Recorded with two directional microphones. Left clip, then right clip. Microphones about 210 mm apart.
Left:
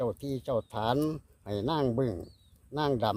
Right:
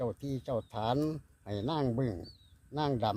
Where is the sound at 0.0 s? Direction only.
40° left (ahead or behind).